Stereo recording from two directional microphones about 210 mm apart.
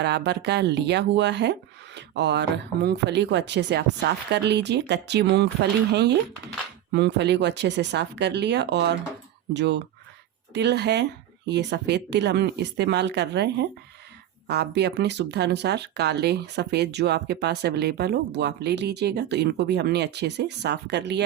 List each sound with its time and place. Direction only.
0.0 s speech: 55° right (ahead or behind)